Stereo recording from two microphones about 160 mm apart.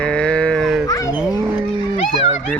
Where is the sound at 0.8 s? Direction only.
20° left (ahead or behind).